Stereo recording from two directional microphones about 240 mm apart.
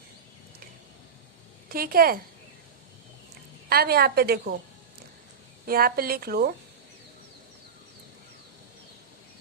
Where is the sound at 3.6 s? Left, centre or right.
Right.